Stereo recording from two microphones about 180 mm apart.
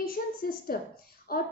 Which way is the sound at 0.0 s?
55° left (ahead or behind).